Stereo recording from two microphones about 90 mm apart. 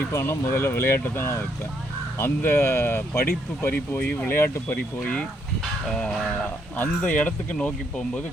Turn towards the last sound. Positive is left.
turn(degrees=15)  # may be behind; listen again after turning